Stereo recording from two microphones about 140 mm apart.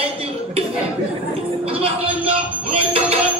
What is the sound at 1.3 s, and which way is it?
Music, 45° right (ahead or behind).